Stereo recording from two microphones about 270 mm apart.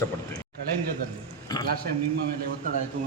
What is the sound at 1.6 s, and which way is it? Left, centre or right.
Speech, centre.